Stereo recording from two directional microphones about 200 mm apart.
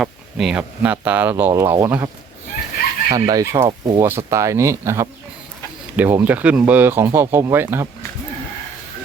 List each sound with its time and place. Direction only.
0.0 s speech: centre (ahead or behind)
3.1 s speech: 20° right (ahead or behind)